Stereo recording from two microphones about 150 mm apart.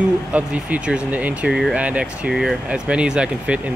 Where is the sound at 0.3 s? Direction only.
10° right (ahead or behind).